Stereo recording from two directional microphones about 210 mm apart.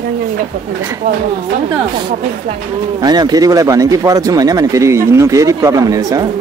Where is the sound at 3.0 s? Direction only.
20° right (ahead or behind).